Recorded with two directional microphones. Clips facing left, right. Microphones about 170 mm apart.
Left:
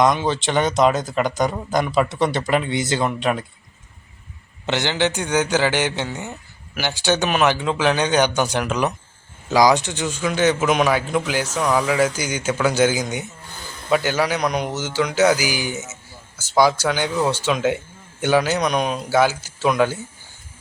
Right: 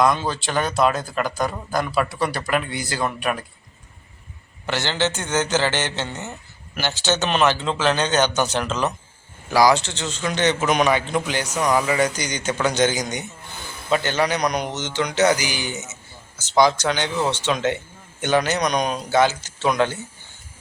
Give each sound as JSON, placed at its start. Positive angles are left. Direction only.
{"t": 0.0, "sound": "speech", "side_deg": 20}
{"t": 4.6, "sound": "a man's voice", "side_deg": 20}